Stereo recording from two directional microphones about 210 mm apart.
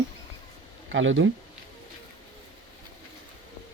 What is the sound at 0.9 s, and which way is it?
Speech, 65° right (ahead or behind).